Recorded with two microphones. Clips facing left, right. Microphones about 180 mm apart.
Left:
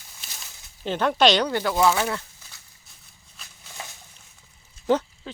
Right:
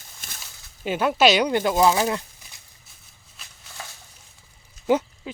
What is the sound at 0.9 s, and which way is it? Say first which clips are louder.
Speech: right 1 dB; 10° right (ahead or behind).